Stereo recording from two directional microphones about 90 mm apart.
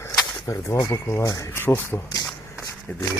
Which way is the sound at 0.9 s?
30° left (ahead or behind).